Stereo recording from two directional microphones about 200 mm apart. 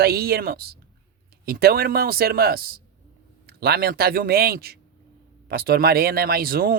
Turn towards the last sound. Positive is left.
turn(degrees=-50)  # may be behind; listen again after turning